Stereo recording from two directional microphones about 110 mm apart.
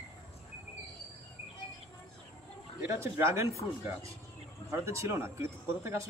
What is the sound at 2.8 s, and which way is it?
Speech, 25° right (ahead or behind).